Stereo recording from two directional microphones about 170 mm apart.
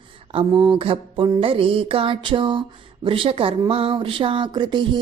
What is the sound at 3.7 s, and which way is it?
A woman's voice, 30° right (ahead or behind).